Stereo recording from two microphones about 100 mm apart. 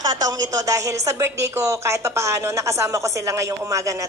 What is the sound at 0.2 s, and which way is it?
Speech, 35° right (ahead or behind).